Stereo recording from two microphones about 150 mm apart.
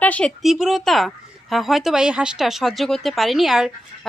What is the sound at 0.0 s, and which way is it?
Speech, 10° left (ahead or behind).